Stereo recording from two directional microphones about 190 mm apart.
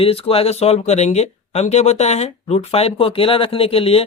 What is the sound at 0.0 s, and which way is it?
Speech, 30° left (ahead or behind).